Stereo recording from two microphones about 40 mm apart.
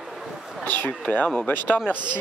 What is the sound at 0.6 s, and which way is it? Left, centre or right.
Speech, left.